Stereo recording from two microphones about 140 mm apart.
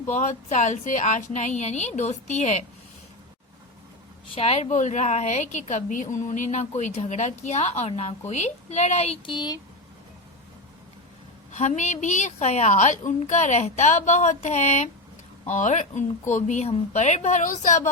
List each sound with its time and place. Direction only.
0.1 s a woman's voice: 55° left (ahead or behind)
4.4 s a woman's voice: 45° left (ahead or behind)
9.2 s speech: 35° left (ahead or behind)
11.5 s a woman's voice: 55° left (ahead or behind)